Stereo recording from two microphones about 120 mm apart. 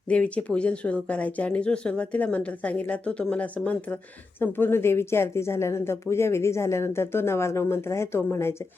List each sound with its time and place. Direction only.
0.1 s speech: 10° left (ahead or behind)